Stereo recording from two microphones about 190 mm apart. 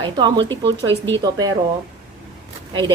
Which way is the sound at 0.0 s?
25° right (ahead or behind).